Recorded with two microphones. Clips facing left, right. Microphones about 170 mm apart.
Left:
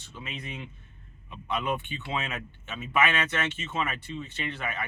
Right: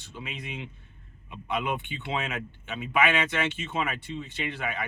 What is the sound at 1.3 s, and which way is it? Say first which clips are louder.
Speech: even; 15° right (ahead or behind).